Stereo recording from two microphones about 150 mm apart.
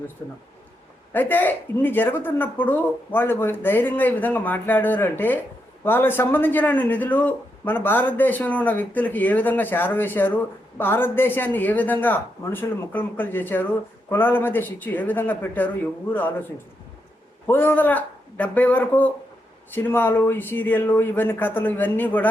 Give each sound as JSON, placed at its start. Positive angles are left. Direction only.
{"t": 0.2, "sound": "speech", "side_deg": 25}
{"t": 1.1, "sound": "speech", "side_deg": 10}
{"t": 17.4, "sound": "speech", "side_deg": 15}